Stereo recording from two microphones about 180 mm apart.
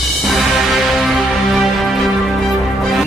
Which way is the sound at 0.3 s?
Centre (ahead or behind).